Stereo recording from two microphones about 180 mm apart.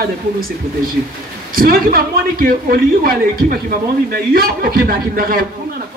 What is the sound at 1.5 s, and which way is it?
A woman's voice, 55° right (ahead or behind).